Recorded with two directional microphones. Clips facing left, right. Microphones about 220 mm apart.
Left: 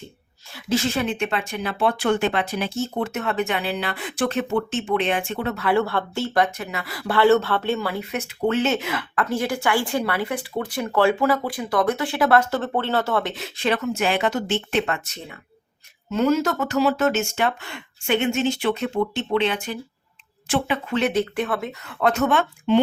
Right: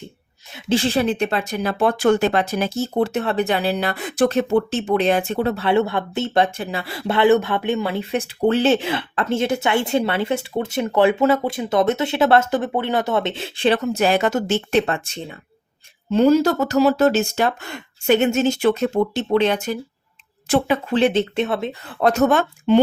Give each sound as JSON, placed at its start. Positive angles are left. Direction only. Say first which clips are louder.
{"t": 0.5, "sound": "speech", "louder": "right 4 dB", "side_deg": -30}
{"t": 21.0, "sound": "speech", "louder": "right 3 dB", "side_deg": -25}